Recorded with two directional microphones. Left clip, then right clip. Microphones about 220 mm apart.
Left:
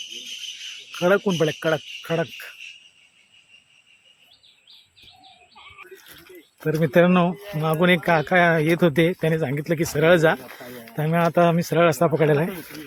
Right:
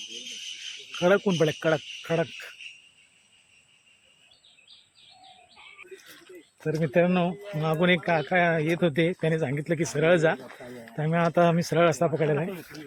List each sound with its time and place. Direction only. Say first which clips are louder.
0.9 s speech: left 3 dB; 5° left (ahead or behind)
6.6 s speech: left 6 dB; 15° left (ahead or behind)